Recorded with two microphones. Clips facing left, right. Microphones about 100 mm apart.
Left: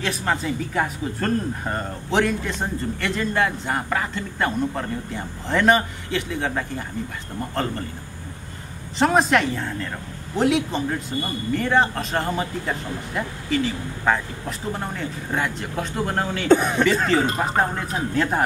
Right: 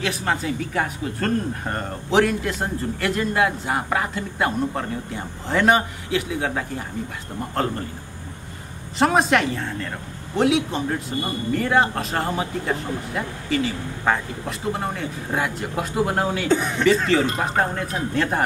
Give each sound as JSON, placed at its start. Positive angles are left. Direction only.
{"t": 0.0, "sound": "speech", "side_deg": 0}
{"t": 8.9, "sound": "speech", "side_deg": 0}
{"t": 16.4, "sound": "speech", "side_deg": 50}
{"t": 17.1, "sound": "speech", "side_deg": 0}